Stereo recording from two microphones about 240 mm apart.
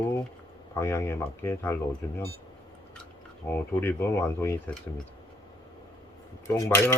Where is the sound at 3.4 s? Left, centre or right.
Centre.